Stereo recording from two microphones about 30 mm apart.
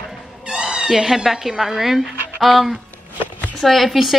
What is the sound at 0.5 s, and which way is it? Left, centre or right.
Cat, right.